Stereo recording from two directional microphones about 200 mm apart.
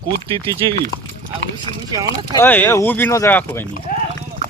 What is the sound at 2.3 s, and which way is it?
Speech, 10° left (ahead or behind).